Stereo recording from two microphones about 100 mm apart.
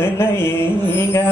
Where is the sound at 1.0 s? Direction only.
25° left (ahead or behind).